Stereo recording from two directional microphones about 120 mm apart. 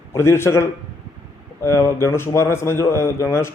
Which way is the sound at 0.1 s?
20° left (ahead or behind).